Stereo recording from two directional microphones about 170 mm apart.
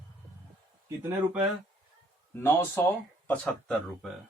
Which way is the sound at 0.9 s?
10° right (ahead or behind).